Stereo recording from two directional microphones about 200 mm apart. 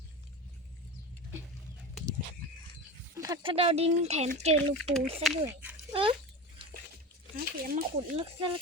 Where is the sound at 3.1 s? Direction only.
15° right (ahead or behind); by 4.5 s 35° right (ahead or behind).